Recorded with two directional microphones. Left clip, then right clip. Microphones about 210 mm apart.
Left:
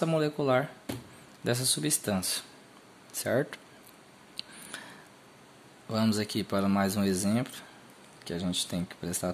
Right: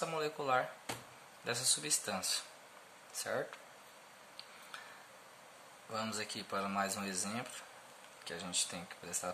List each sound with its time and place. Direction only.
0.0 s speech: 35° left (ahead or behind)
4.4 s a sound: 40° left (ahead or behind)
5.9 s speech: 40° left (ahead or behind)